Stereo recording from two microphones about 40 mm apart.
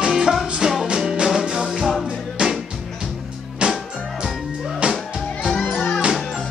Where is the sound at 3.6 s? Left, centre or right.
Right.